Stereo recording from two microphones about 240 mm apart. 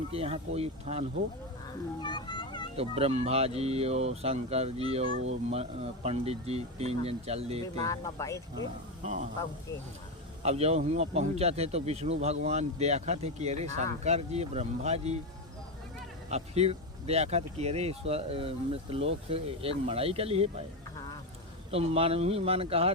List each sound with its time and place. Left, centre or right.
0.1 s speech: right
2.0 s children playing: centre
2.7 s speech: right
7.8 s speech: centre
8.6 s speech: right
10.4 s speech: right
16.3 s speech: right
21.7 s speech: right